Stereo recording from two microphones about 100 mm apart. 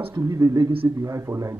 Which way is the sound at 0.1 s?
35° right (ahead or behind).